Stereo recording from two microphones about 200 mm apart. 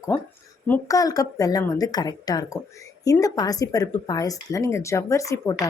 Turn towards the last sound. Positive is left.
turn(degrees=15)  # may be behind; listen again after turning